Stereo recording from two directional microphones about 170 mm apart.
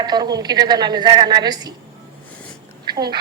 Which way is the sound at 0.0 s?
25° right (ahead or behind).